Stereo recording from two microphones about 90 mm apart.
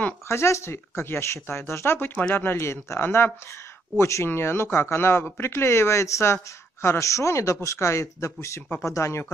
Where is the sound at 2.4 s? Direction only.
30° left (ahead or behind).